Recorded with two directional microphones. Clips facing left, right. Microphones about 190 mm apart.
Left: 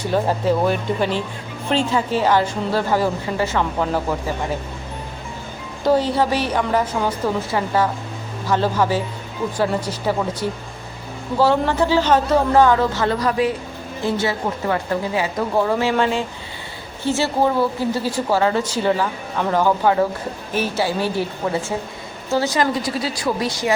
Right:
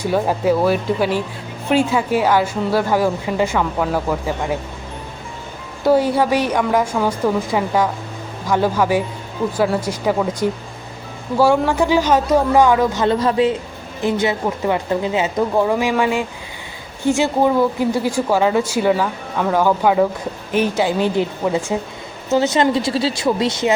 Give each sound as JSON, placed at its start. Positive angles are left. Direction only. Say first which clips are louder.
{"t": 0.0, "sound": "a man's voice", "louder": "right 2 dB", "side_deg": -10}
{"t": 5.8, "sound": "a man's voice", "louder": "right 2 dB", "side_deg": -10}